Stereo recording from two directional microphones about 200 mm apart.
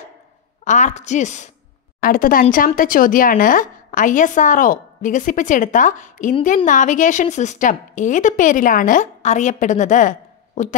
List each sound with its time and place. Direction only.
0.7 s a woman's voice: 40° left (ahead or behind)